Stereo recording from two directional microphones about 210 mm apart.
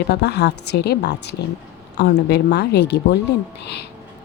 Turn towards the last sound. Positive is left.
turn(degrees=55)  # may be behind; listen again after turning